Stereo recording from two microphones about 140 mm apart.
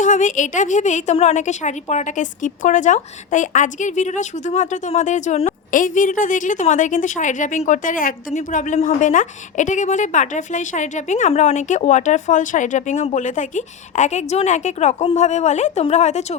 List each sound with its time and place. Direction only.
0.0 s a woman's voice: 65° left (ahead or behind)
5.7 s a woman's voice: 70° left (ahead or behind); by 16.2 s 55° left (ahead or behind)